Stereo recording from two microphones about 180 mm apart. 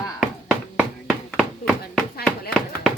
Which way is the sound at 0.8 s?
Centre (ahead or behind).